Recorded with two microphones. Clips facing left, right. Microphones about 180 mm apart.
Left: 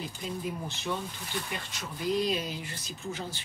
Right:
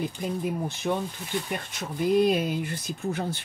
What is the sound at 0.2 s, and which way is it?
Speech, 55° right (ahead or behind).